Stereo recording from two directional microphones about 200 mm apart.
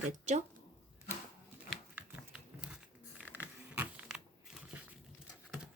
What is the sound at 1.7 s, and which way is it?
Crumpling, 5° right (ahead or behind).